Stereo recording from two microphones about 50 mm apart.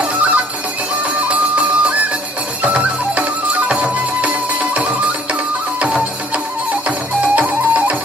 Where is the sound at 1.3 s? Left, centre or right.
Right.